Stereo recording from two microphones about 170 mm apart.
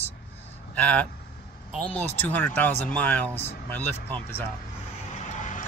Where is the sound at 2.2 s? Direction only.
10° left (ahead or behind).